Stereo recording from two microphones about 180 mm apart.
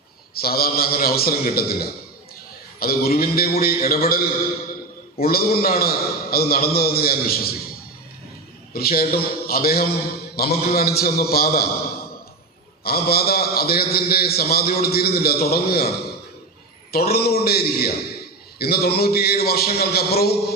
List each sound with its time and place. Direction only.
0.3 s a man's voice: 60° left (ahead or behind)
8.7 s a man's voice: 55° left (ahead or behind)
12.8 s a man's voice: 60° left (ahead or behind)
16.9 s a man's voice: 60° left (ahead or behind)